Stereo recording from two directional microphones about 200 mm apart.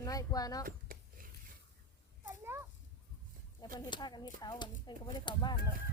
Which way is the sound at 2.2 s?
10° right (ahead or behind).